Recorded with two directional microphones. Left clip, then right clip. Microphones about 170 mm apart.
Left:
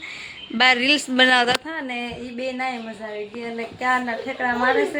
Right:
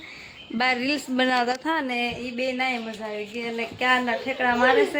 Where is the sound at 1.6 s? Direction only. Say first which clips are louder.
Right 5 dB; 45° right (ahead or behind).